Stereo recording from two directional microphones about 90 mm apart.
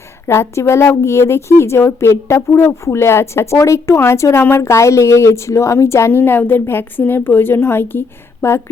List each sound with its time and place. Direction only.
0.3 s a woman's voice: 30° left (ahead or behind)